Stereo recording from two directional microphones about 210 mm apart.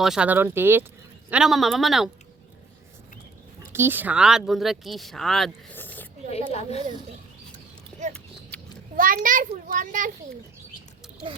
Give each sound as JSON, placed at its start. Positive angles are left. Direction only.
{"t": 0.0, "sound": "speech", "side_deg": -5}
{"t": 3.7, "sound": "speech", "side_deg": -10}
{"t": 6.5, "sound": "speech", "side_deg": 30}
{"t": 8.1, "sound": "a sound", "side_deg": 5}
{"t": 9.0, "sound": "a child's voice", "side_deg": -40}